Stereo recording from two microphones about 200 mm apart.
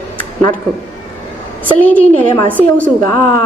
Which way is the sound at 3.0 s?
20° left (ahead or behind).